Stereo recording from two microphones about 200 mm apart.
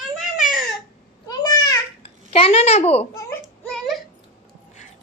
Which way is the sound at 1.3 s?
20° left (ahead or behind).